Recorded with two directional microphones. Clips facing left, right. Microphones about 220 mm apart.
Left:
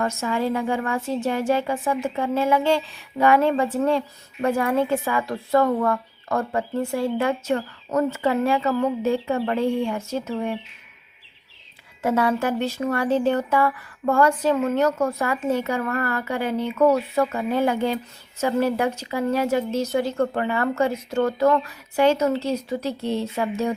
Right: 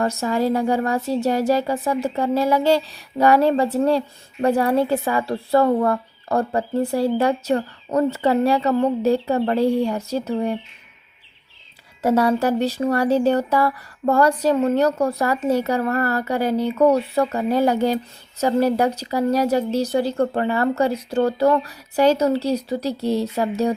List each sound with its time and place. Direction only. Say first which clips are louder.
0.0 s speech: right 3 dB; 35° right (ahead or behind)
12.0 s speech: right 4 dB; 40° right (ahead or behind)